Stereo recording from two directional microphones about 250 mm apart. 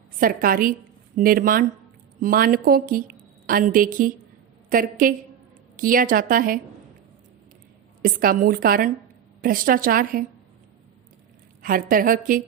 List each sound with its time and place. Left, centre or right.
0.2 s a woman's voice: right
8.0 s a woman's voice: right
11.6 s a woman's voice: right